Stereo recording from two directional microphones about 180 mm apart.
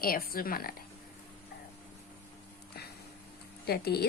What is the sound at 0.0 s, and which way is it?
Speech, 55° left (ahead or behind).